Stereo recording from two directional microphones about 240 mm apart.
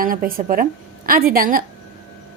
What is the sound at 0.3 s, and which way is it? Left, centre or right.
A woman's voice, right.